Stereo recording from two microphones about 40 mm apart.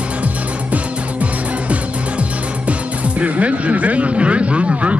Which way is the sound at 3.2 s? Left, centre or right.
Right.